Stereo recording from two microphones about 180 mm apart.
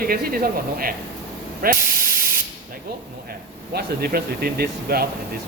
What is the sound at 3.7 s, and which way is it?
Speech, 60° right (ahead or behind).